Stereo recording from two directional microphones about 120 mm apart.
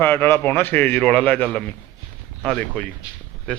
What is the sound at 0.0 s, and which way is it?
A man's voice, 15° left (ahead or behind).